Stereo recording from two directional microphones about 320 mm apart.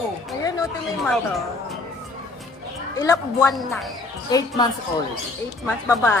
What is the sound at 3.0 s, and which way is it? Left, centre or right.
Speech, centre.